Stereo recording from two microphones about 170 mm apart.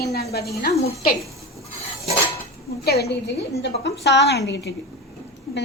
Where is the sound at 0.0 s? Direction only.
70° left (ahead or behind).